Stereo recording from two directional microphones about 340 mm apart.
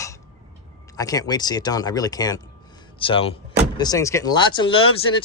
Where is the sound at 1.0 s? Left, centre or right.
Centre.